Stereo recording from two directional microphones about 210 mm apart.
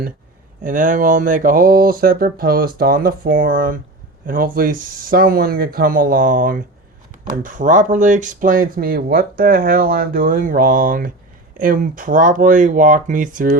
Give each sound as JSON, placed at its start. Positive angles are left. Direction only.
{"t": 0.6, "sound": "speech", "side_deg": -40}